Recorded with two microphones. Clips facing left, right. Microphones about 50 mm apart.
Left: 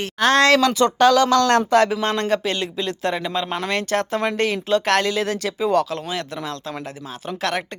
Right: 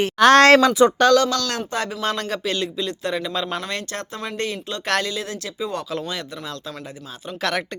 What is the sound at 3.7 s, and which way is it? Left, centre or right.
Speech, left.